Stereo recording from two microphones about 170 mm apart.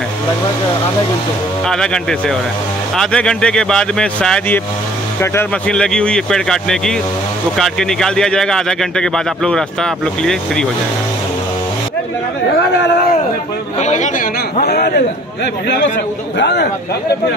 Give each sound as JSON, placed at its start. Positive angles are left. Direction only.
{"t": 1.7, "sound": "speech", "side_deg": 5}
{"t": 13.7, "sound": "speech", "side_deg": 45}
{"t": 14.6, "sound": "a man's voice", "side_deg": 70}
{"t": 16.3, "sound": "speech", "side_deg": 80}